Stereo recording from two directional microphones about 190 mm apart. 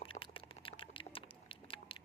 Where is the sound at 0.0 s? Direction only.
30° left (ahead or behind).